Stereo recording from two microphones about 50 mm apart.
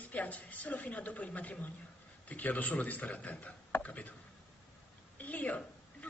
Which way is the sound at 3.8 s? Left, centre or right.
Left.